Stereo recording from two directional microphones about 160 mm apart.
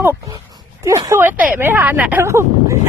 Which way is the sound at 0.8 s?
20° right (ahead or behind).